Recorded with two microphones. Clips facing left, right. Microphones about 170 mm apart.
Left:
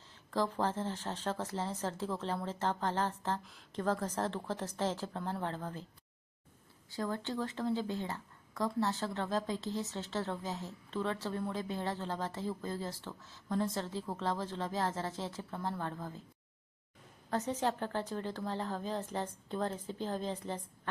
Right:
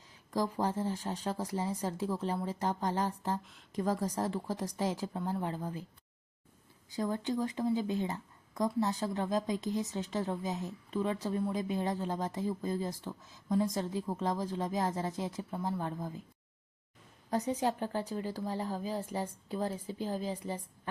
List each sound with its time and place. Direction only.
0.3 s speech: 10° right (ahead or behind)
6.9 s speech: 15° right (ahead or behind)
17.3 s speech: 15° right (ahead or behind)